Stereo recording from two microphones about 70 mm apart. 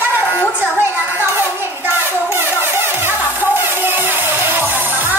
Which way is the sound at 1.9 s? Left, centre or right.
Right.